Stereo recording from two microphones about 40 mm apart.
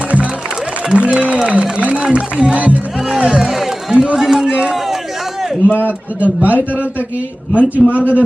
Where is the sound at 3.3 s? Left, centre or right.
Centre.